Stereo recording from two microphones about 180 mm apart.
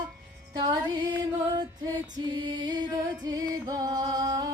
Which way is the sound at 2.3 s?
25° right (ahead or behind).